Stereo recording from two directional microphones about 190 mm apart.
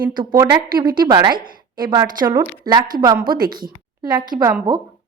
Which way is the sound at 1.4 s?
50° right (ahead or behind).